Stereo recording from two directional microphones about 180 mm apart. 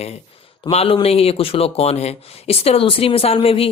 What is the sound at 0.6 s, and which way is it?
Speech, 30° left (ahead or behind).